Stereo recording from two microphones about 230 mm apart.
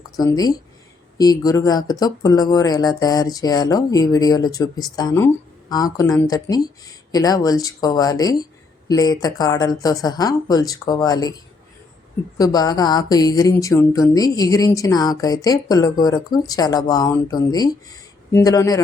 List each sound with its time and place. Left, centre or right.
0.2 s speech: centre
12.4 s speech: centre